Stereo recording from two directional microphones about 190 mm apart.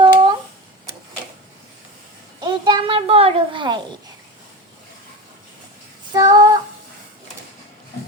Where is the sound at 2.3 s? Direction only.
25° right (ahead or behind).